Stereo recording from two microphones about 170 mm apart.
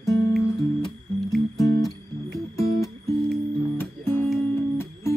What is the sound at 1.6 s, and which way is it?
Music, 20° left (ahead or behind).